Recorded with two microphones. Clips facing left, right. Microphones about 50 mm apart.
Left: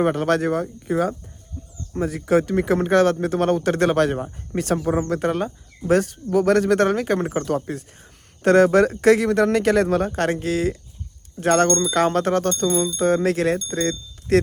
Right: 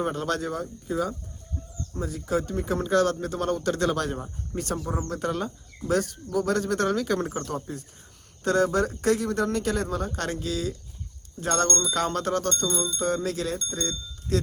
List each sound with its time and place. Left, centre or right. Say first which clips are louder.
0.0 s speech: left 8 dB; left
7.4 s a man's voice: left 8 dB; left
10.1 s speech: left 8 dB; left